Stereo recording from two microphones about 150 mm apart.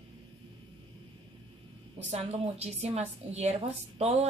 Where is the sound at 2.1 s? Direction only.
45° right (ahead or behind).